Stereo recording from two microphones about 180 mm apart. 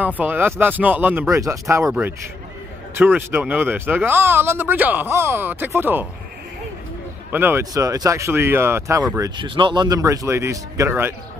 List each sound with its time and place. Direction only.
0.0 s speech: 10° right (ahead or behind)
7.2 s speech: 10° right (ahead or behind)